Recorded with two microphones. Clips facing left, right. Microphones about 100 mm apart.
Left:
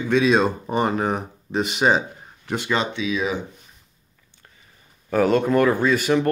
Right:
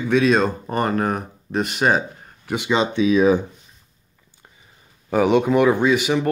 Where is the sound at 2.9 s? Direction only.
40° right (ahead or behind).